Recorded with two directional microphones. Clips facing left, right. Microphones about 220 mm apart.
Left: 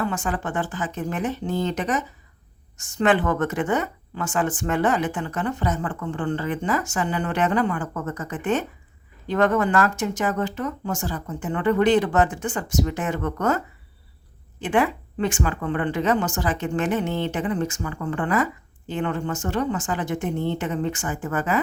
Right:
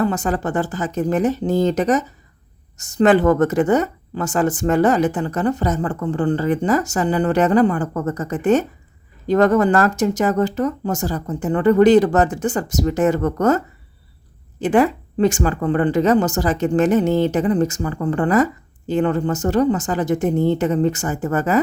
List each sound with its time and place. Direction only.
0.0 s a woman's voice: 40° right (ahead or behind)
14.6 s a woman's voice: 40° right (ahead or behind)